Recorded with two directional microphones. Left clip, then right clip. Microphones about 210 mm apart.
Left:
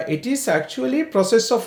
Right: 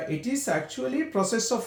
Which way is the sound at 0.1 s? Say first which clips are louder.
Left 8 dB; 40° left (ahead or behind).